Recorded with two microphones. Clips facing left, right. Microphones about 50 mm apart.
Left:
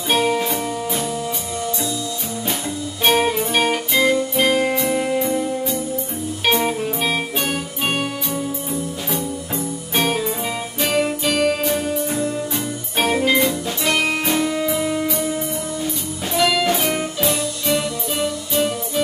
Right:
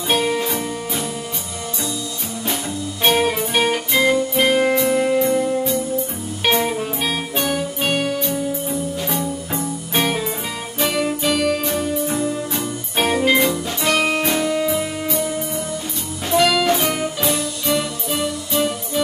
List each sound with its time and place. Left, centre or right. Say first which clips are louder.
0.1 s music: left 1 dB; centre
3.0 s music: even; centre
11.3 s music: left 3 dB; left
11.6 s music: even; centre
13.0 s music: right 1 dB; centre
13.4 s music: right 1 dB; centre
16.3 s music: right 2 dB; centre